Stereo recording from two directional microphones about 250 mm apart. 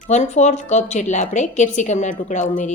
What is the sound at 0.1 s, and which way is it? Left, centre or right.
A woman's voice, left.